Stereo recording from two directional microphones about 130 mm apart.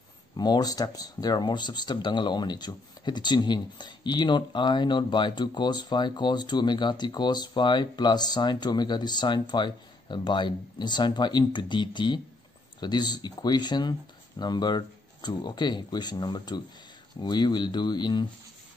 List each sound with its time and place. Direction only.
0.4 s speech: 30° left (ahead or behind)